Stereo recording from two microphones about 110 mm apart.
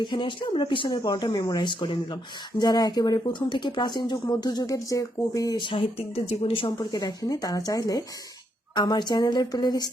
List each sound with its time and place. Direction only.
0.0 s speech: 50° left (ahead or behind); by 5.5 s 30° left (ahead or behind)
5.5 s speech: 50° left (ahead or behind)
6.7 s speech: 35° left (ahead or behind)